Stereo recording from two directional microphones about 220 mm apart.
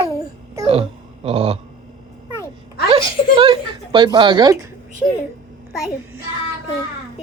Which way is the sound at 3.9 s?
20° right (ahead or behind).